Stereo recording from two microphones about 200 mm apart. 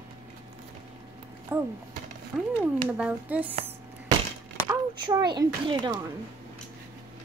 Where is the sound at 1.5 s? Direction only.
10° right (ahead or behind).